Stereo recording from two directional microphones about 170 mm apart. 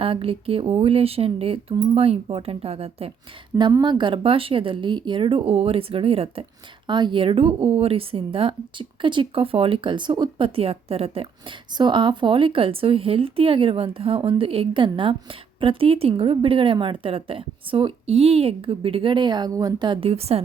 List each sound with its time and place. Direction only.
0.0 s a woman's voice: 35° right (ahead or behind)
3.6 s a woman's voice: 25° right (ahead or behind)